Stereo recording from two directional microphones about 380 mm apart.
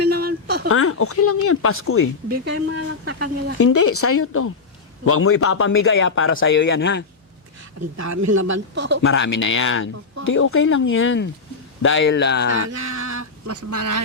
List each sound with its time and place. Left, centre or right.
0.1 s a sound: right
0.7 s a man's voice: left
2.3 s speech: right
3.6 s a man's voice: left
7.9 s speech: right
8.3 s speech: right
9.0 s a man's voice: left
12.6 s a sound: right
13.7 s speech: right